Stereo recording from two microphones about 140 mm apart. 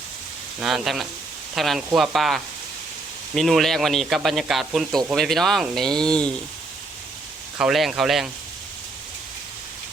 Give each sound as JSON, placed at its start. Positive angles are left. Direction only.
{"t": 0.6, "sound": "speech", "side_deg": 0}
{"t": 7.6, "sound": "speech", "side_deg": 0}